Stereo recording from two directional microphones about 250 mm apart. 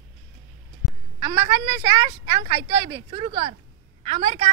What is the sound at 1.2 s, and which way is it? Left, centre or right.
Speech, centre.